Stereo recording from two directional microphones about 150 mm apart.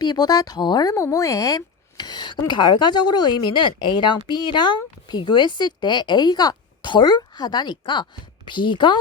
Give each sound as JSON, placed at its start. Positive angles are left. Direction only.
{"t": 0.0, "sound": "a woman's voice", "side_deg": 30}